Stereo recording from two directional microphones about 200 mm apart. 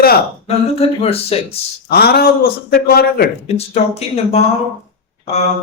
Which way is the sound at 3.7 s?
30° left (ahead or behind).